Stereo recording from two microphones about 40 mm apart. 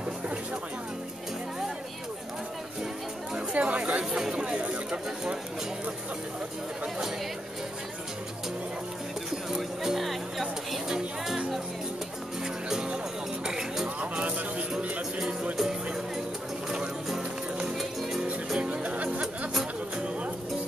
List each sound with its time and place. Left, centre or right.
3.3 s speech: right
4.1 s speech: centre
9.5 s music: centre
13.5 s music: centre
17.6 s music: centre
18.6 s music: right